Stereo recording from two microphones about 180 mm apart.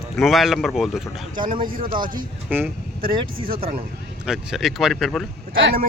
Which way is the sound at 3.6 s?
30° right (ahead or behind).